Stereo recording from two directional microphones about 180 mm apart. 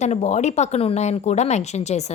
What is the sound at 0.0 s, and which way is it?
Speech, 40° left (ahead or behind).